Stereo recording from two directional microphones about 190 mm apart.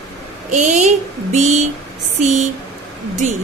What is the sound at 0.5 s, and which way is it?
A woman's voice, 40° right (ahead or behind).